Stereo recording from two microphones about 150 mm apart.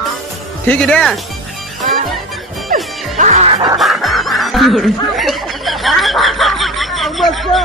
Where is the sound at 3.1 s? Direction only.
50° right (ahead or behind).